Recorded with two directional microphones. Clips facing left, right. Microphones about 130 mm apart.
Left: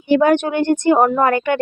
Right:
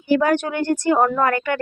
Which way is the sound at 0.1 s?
20° left (ahead or behind).